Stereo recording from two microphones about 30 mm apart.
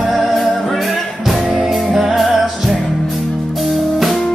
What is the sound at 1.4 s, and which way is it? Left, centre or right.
Music, centre.